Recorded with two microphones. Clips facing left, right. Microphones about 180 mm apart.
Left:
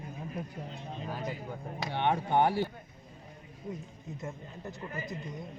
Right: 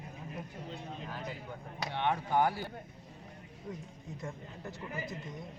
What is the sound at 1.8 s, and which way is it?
Speech, 30° left (ahead or behind).